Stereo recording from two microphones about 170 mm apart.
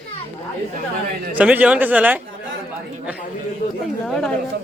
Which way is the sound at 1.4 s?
10° right (ahead or behind).